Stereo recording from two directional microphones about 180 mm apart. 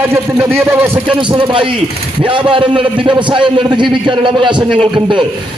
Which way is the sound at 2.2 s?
30° right (ahead or behind).